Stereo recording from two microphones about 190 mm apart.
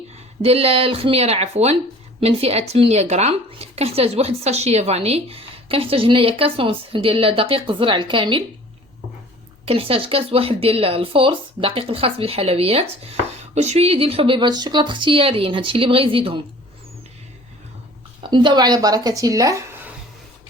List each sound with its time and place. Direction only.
0.4 s speech: 30° right (ahead or behind)
9.6 s speech: 30° right (ahead or behind)
18.2 s speech: 25° right (ahead or behind)